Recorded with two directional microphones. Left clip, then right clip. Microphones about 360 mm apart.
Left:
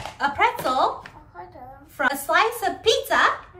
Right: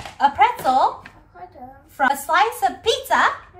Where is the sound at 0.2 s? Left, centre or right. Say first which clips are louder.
Right 5 dB; centre.